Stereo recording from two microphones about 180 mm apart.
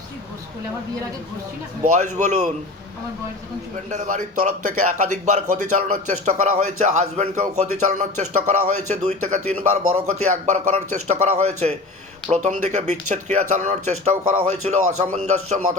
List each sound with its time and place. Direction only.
1.8 s a man's voice: 40° right (ahead or behind)
3.8 s a man's voice: 45° right (ahead or behind)